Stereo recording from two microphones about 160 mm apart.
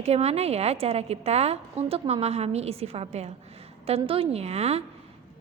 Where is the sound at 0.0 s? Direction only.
40° right (ahead or behind).